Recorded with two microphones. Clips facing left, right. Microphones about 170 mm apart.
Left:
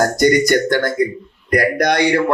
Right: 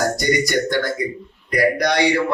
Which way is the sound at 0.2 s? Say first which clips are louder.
Left 6 dB; 50° left (ahead or behind).